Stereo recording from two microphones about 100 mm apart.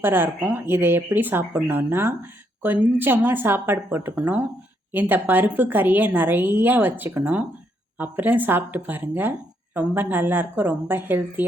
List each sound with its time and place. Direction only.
0.0 s a woman's voice: 20° right (ahead or behind)